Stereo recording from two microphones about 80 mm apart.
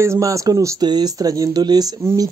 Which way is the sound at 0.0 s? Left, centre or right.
Right.